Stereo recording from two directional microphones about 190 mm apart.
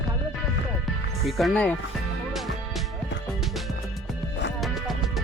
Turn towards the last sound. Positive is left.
turn(degrees=0)  # may be behind; listen again after turning